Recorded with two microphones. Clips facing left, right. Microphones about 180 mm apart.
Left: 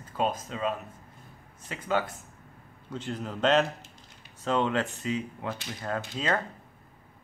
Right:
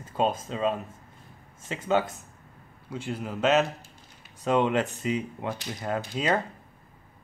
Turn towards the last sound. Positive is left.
turn(degrees=-15)  # may be behind; listen again after turning